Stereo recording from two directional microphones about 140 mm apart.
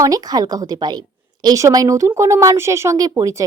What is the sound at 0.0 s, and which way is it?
A woman's voice, 25° right (ahead or behind).